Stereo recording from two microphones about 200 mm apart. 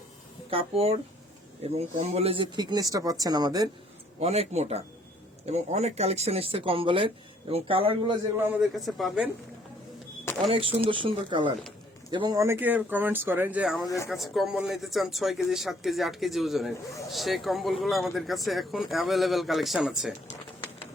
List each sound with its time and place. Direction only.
0.5 s speech: 30° right (ahead or behind)
4.2 s speech: 30° right (ahead or behind)
8.4 s speech: 5° right (ahead or behind)
10.5 s speech: 25° right (ahead or behind); by 13.8 s 5° right (ahead or behind)
13.8 s speech: 15° left (ahead or behind)
14.1 s speech: centre (ahead or behind)